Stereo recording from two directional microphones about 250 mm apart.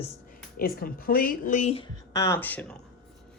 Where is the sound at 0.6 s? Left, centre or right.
Left.